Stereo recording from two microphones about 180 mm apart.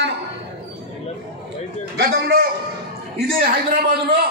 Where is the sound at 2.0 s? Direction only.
60° right (ahead or behind).